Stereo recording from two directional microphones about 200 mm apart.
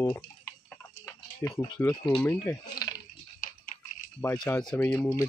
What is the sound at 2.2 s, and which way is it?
Speech, 10° left (ahead or behind).